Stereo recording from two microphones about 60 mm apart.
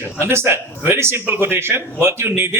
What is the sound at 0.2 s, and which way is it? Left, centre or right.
A man's voice, right.